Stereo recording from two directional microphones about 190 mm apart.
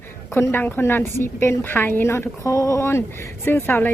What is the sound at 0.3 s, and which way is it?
A woman's voice, 10° left (ahead or behind).